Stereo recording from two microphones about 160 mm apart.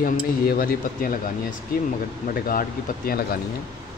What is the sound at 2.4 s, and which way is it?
Speech, 65° left (ahead or behind).